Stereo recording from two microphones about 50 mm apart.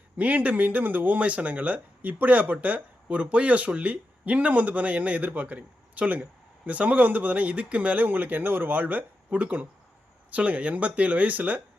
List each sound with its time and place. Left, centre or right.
0.2 s speech: right